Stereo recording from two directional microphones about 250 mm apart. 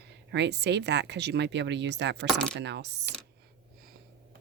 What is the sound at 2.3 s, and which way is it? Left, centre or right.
Speech, centre.